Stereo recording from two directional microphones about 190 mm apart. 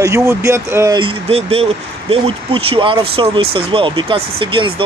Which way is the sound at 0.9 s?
30° right (ahead or behind).